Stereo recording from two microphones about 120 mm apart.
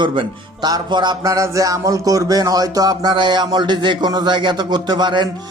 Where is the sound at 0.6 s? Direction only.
35° right (ahead or behind).